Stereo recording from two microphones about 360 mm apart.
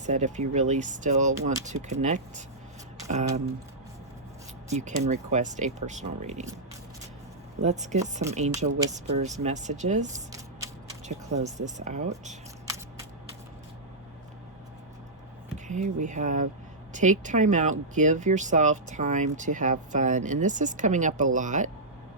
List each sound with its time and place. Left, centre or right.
0.0 s speech: centre
4.7 s speech: centre
7.6 s speech: centre
15.5 s speech: centre